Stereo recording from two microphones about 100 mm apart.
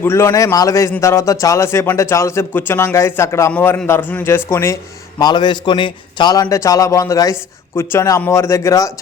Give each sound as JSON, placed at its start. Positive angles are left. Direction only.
{"t": 0.0, "sound": "a man's voice", "side_deg": 25}
{"t": 5.2, "sound": "a man's voice", "side_deg": 45}